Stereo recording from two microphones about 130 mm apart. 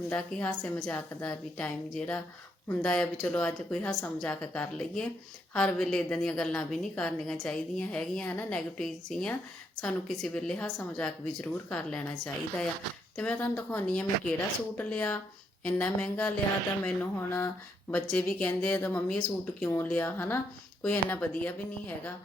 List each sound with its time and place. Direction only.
0.1 s a woman's voice: 10° left (ahead or behind)